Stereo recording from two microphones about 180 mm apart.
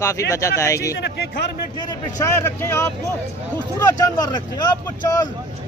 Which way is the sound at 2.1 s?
15° left (ahead or behind).